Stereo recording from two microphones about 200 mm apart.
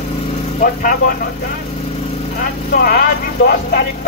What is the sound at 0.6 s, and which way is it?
Speech, 45° left (ahead or behind).